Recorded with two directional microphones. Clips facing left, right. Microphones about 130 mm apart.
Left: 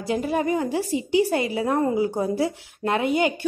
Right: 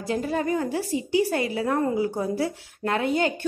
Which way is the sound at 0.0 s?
15° left (ahead or behind).